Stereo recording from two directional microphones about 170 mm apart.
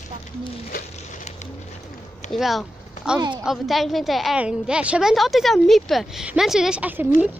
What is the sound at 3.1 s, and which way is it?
Speech, 25° right (ahead or behind).